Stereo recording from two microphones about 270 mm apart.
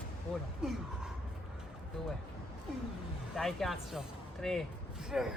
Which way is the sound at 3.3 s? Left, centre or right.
Centre.